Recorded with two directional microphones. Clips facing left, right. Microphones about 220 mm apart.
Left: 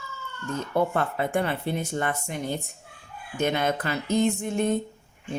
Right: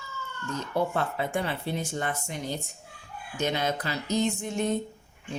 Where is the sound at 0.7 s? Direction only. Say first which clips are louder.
Left 3 dB; 55° left (ahead or behind).